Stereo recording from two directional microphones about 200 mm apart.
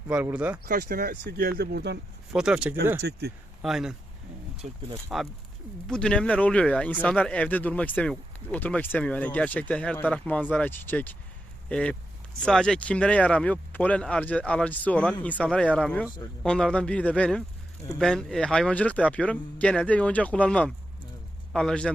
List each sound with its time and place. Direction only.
0.1 s speech: 10° right (ahead or behind)
0.6 s speech: 50° right (ahead or behind)
2.3 s speech: 5° right (ahead or behind)
3.0 s speech: 55° right (ahead or behind)
3.6 s speech: centre (ahead or behind)
4.5 s speech: 30° right (ahead or behind)
5.9 s speech: 5° left (ahead or behind)